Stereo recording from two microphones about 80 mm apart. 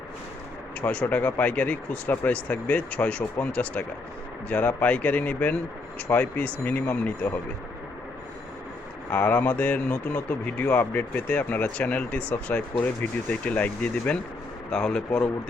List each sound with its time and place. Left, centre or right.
0.8 s speech: centre
9.0 s speech: left